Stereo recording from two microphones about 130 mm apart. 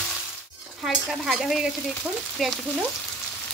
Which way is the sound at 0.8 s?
Centre (ahead or behind).